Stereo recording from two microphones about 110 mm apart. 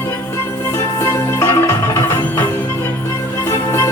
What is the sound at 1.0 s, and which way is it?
Music, 25° left (ahead or behind).